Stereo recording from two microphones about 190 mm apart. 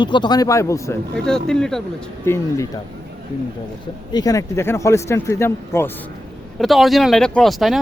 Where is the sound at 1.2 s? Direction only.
5° left (ahead or behind).